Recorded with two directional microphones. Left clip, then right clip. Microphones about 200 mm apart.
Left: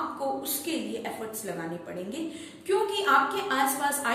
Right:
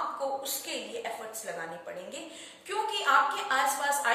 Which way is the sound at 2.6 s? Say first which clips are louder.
Left 3 dB; centre (ahead or behind).